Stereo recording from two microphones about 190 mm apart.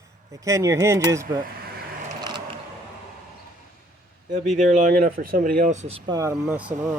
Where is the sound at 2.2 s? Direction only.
20° right (ahead or behind).